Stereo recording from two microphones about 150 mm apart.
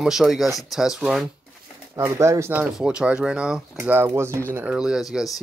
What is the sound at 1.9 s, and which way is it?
Speech, 20° right (ahead or behind).